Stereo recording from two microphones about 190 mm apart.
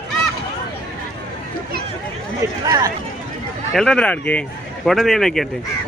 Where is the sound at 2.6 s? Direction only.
20° right (ahead or behind).